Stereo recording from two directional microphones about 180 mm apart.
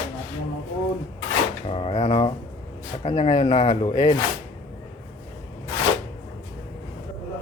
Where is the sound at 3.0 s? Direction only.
25° left (ahead or behind).